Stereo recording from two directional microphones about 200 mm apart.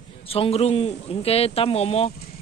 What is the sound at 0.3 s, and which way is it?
A man's voice, 30° left (ahead or behind).